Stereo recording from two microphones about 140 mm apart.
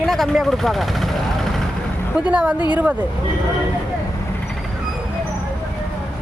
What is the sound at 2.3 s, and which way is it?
Speech, 10° right (ahead or behind).